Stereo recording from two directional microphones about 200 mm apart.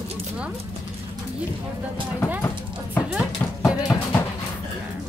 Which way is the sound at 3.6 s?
15° left (ahead or behind).